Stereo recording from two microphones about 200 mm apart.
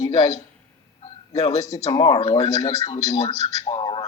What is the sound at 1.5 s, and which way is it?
Speech, 15° left (ahead or behind).